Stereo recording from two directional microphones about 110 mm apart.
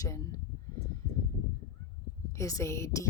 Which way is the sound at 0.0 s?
30° left (ahead or behind).